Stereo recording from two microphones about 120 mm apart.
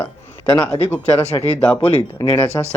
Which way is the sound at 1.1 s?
60° left (ahead or behind).